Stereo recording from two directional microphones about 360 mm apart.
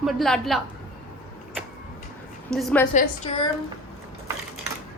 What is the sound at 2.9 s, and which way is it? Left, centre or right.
Speech, centre.